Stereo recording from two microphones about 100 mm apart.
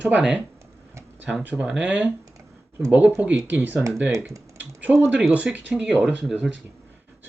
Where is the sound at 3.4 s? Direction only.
15° right (ahead or behind).